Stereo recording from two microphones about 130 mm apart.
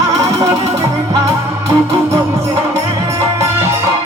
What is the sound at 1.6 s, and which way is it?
Music, 45° right (ahead or behind).